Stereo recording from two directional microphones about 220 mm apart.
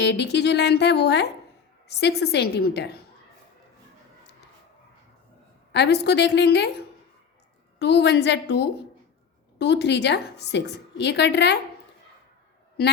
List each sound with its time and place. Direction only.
0.0 s a woman's voice: 50° left (ahead or behind)
5.7 s a woman's voice: 50° left (ahead or behind)
7.8 s a woman's voice: 50° left (ahead or behind)